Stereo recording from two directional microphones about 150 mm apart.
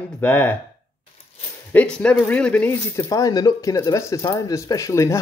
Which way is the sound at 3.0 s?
25° left (ahead or behind).